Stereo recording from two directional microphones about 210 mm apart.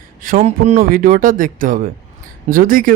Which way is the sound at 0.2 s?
40° right (ahead or behind).